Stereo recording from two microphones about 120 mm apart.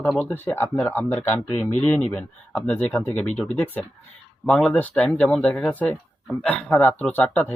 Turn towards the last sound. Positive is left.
turn(degrees=10)  # may be behind; listen again after turning